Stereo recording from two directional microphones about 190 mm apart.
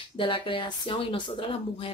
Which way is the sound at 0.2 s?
25° left (ahead or behind).